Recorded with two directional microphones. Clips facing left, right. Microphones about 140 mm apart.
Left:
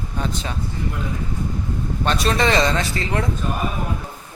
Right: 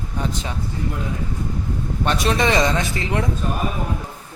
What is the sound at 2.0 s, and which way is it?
Speech, 15° right (ahead or behind).